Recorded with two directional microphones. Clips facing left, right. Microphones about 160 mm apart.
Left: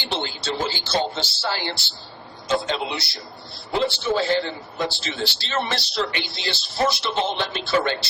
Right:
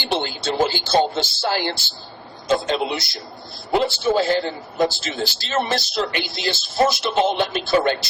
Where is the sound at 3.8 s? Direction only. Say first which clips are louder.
Right 3 dB; 10° right (ahead or behind).